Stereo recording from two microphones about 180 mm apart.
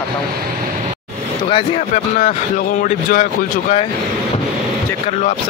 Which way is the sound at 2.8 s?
45° left (ahead or behind).